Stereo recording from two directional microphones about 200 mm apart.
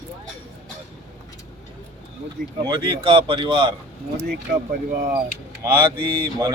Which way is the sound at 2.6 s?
20° right (ahead or behind).